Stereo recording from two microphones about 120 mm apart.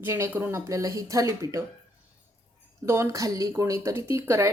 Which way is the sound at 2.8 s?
20° right (ahead or behind).